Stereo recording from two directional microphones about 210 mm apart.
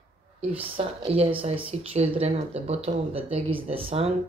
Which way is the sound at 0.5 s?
25° right (ahead or behind).